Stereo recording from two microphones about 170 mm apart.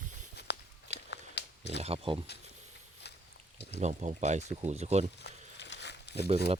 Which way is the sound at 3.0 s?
75° left (ahead or behind).